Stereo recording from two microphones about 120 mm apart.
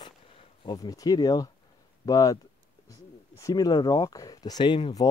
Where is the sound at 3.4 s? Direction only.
30° left (ahead or behind).